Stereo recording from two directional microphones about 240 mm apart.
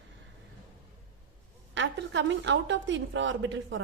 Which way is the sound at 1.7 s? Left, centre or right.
Right.